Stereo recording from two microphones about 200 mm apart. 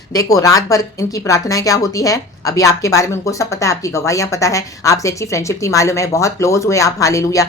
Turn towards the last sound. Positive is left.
turn(degrees=15)  # may be behind; listen again after turning